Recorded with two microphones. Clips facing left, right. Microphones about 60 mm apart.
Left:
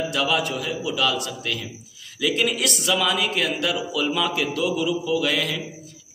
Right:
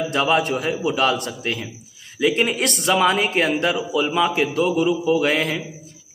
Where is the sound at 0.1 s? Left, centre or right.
Right.